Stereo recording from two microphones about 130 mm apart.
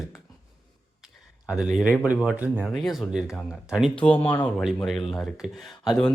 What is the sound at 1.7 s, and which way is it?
A man's voice, 5° right (ahead or behind).